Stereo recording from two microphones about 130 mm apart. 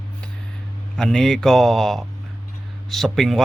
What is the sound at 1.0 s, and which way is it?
A man's voice, 5° left (ahead or behind).